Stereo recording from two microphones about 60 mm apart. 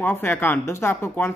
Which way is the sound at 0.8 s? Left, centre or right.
Left.